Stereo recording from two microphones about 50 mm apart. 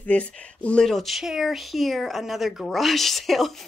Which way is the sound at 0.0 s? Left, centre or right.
Left.